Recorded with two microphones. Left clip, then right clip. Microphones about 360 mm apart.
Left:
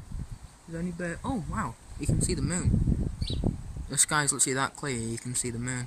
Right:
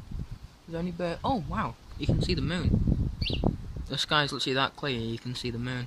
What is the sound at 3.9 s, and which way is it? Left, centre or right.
Speech, centre.